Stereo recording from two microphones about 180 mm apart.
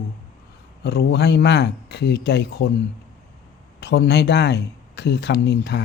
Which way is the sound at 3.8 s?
65° left (ahead or behind).